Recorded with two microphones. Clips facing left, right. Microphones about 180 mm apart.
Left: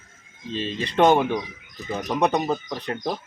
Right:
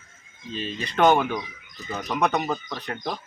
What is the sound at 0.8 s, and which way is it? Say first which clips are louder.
Speech: left 2 dB; 30° left (ahead or behind).